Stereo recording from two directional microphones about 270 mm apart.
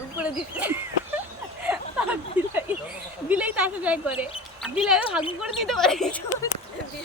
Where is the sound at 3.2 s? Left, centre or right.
Centre.